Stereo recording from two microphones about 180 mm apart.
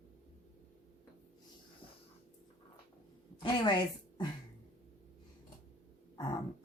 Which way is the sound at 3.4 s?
25° left (ahead or behind).